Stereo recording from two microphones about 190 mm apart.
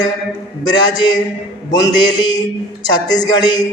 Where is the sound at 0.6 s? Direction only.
20° left (ahead or behind).